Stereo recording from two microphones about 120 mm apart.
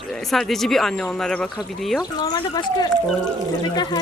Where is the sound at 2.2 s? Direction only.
35° left (ahead or behind).